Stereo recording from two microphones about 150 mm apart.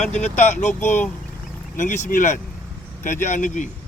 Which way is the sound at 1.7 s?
55° left (ahead or behind).